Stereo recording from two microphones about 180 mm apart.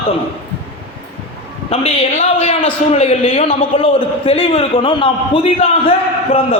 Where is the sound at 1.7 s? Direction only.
35° left (ahead or behind).